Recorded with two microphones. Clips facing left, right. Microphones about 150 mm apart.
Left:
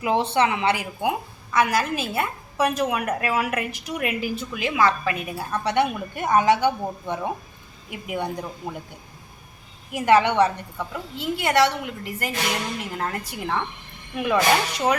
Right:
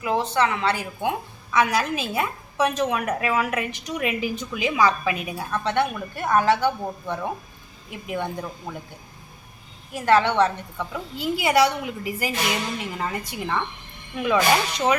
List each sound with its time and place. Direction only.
0.0 s a woman's voice: 25° left (ahead or behind)
1.5 s a woman's voice: 5° left (ahead or behind)
5.5 s a woman's voice: 10° left (ahead or behind)
9.9 s a woman's voice: 15° left (ahead or behind)
10.9 s a woman's voice: centre (ahead or behind)